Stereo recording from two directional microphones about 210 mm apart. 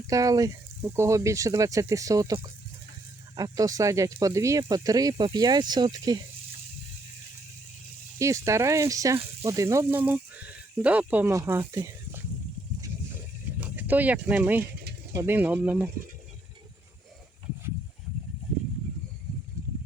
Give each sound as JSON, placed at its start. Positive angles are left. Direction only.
{"t": 0.1, "sound": "speech", "side_deg": -15}
{"t": 8.2, "sound": "speech", "side_deg": -15}
{"t": 13.6, "sound": "speech", "side_deg": -10}